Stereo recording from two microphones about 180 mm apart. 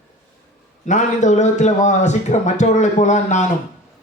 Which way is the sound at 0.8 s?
40° left (ahead or behind).